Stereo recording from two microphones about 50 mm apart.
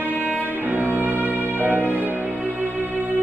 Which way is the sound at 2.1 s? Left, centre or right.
Right.